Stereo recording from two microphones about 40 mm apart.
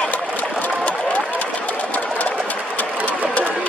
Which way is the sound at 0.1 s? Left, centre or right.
Left.